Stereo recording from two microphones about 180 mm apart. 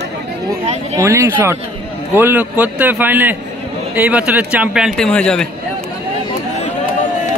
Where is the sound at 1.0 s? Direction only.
15° right (ahead or behind); by 5.4 s 5° left (ahead or behind).